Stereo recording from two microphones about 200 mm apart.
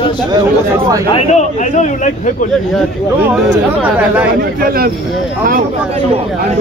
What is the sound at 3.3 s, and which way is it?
Speech, 5° right (ahead or behind).